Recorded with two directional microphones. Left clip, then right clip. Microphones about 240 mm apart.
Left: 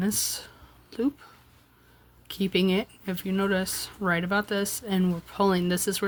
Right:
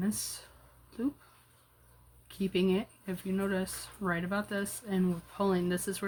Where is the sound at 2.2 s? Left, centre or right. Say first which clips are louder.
Left 5 dB; left.